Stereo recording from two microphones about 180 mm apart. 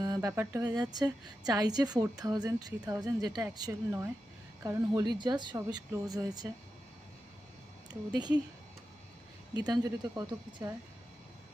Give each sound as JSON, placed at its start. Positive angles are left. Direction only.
{"t": 0.0, "sound": "a woman's voice", "side_deg": -20}
{"t": 7.9, "sound": "a woman's voice", "side_deg": -25}
{"t": 9.6, "sound": "a woman's voice", "side_deg": -20}